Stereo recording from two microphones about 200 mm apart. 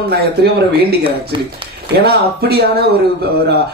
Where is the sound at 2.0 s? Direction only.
55° right (ahead or behind).